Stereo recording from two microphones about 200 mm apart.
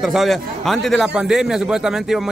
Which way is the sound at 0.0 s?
Centre (ahead or behind).